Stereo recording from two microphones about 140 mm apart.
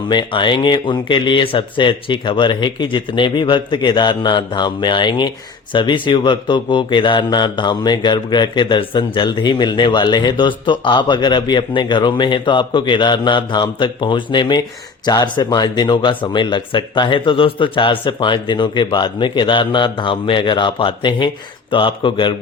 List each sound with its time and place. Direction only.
0.1 s a man's voice: 35° left (ahead or behind)